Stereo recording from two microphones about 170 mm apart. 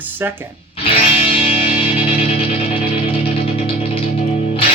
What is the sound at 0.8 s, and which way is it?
Music, 35° left (ahead or behind).